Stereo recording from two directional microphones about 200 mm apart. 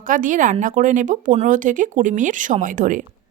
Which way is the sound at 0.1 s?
40° right (ahead or behind).